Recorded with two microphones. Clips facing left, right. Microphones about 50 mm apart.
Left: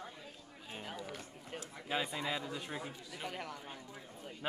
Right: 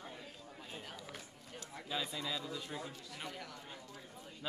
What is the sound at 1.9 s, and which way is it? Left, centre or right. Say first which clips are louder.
Speech: left 3 dB; left.